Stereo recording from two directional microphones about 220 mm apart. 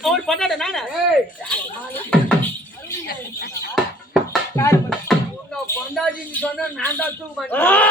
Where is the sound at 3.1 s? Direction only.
45° left (ahead or behind).